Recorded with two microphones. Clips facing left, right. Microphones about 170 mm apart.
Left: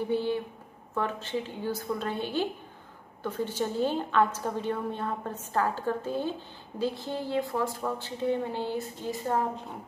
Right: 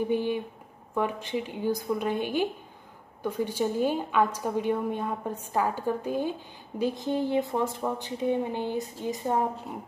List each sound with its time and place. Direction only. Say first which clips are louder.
0.1 s a woman's voice: right 1 dB; 15° right (ahead or behind)